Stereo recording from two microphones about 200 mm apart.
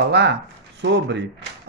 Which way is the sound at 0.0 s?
60° right (ahead or behind).